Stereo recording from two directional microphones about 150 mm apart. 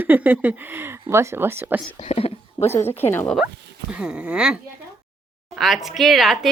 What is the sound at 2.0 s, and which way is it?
Speech, 45° left (ahead or behind).